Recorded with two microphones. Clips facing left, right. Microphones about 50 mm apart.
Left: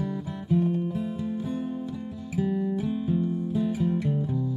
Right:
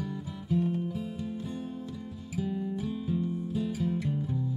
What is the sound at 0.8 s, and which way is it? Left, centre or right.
Music, centre.